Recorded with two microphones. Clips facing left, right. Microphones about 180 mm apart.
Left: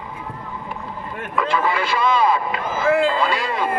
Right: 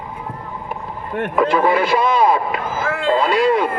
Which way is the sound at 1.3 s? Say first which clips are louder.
Right 5 dB; 50° right (ahead or behind).